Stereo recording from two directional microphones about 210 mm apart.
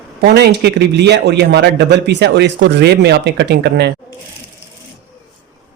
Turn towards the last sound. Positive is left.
turn(degrees=-55)  # may be behind; listen again after turning